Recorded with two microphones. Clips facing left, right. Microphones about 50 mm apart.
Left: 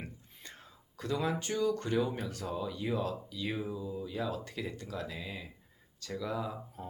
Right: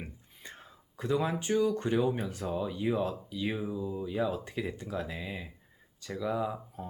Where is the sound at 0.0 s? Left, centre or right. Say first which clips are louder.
Right 2 dB; centre.